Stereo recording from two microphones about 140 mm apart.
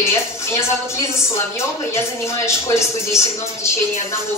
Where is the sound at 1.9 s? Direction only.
20° left (ahead or behind).